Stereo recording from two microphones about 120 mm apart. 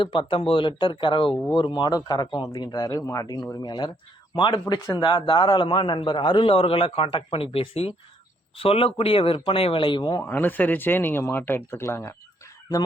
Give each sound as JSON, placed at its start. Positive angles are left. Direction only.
{"t": 0.0, "sound": "a man's voice", "side_deg": 45}
{"t": 10.2, "sound": "speech", "side_deg": 15}